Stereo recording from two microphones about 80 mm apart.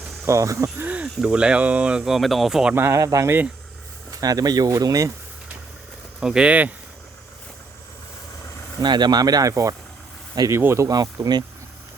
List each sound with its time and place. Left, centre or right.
0.3 s speech: right
1.0 s speech: centre
2.7 s speech: right
3.0 s speech: right
6.1 s speech: centre
8.8 s speech: right
10.5 s speech: right
10.8 s speech: right